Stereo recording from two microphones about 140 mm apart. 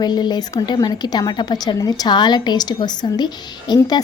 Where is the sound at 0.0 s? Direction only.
30° left (ahead or behind).